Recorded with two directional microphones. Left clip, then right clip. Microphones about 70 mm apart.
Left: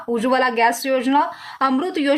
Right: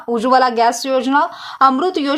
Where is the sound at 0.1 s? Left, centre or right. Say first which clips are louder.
Right 5 dB; right.